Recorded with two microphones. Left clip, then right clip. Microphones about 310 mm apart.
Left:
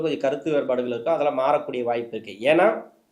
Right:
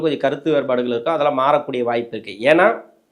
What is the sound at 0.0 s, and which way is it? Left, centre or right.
Speech, right.